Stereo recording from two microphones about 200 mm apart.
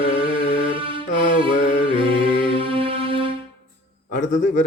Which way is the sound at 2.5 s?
25° right (ahead or behind).